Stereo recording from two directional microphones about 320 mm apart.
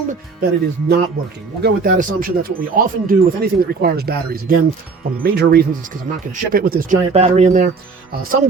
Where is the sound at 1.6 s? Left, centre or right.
Right.